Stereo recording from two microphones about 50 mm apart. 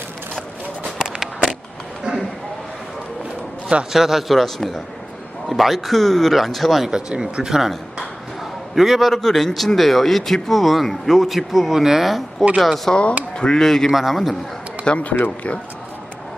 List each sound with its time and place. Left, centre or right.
0.9 s a sound: centre
3.9 s speech: centre
6.9 s speech: centre
7.4 s speech: centre
12.9 s a man's voice: left; by 14.3 s centre
14.8 s speech: left